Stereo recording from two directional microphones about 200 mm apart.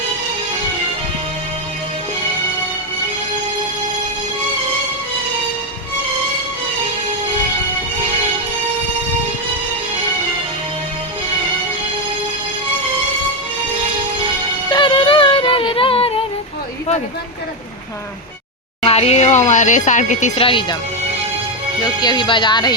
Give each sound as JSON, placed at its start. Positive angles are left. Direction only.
{"t": 14.7, "sound": "music", "side_deg": 25}
{"t": 18.8, "sound": "speech", "side_deg": 30}
{"t": 21.8, "sound": "speech", "side_deg": 20}